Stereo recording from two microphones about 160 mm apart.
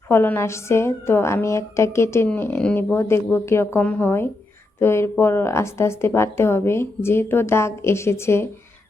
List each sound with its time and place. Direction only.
0.1 s a woman's voice: 15° left (ahead or behind)